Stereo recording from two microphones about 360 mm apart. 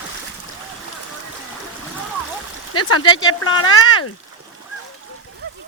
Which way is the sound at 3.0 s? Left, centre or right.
Centre.